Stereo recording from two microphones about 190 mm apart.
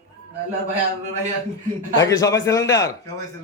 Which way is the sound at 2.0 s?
15° left (ahead or behind).